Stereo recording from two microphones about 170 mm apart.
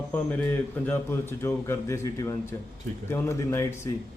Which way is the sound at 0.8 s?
15° left (ahead or behind).